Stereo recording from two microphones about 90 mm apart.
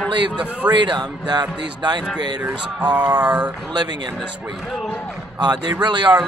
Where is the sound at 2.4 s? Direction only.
15° right (ahead or behind).